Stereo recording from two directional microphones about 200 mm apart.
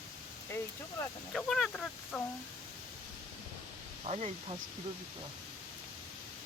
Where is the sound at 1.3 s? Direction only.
Centre (ahead or behind).